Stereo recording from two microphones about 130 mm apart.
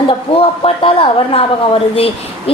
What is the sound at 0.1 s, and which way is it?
Speech, 45° left (ahead or behind).